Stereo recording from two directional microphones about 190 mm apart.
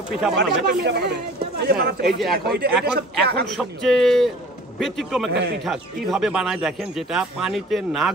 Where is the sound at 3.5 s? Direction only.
Centre (ahead or behind).